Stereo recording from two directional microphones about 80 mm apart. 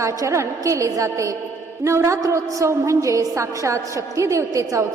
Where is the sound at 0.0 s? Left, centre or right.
Right.